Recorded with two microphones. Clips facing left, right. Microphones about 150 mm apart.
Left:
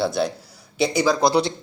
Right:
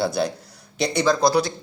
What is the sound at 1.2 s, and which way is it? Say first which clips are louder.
Speech: left 1 dB; 25° left (ahead or behind).